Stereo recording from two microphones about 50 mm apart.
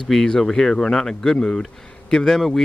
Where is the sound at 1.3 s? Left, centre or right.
Centre.